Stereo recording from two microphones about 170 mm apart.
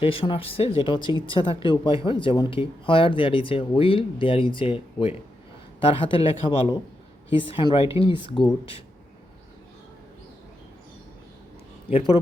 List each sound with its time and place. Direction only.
0.0 s speech: 35° left (ahead or behind)
11.9 s speech: 35° left (ahead or behind)